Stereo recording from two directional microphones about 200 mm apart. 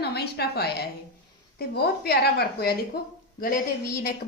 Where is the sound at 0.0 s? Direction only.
55° left (ahead or behind).